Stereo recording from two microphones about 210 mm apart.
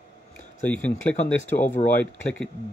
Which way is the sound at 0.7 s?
5° left (ahead or behind).